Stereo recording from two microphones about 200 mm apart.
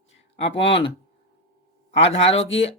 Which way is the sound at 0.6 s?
30° left (ahead or behind).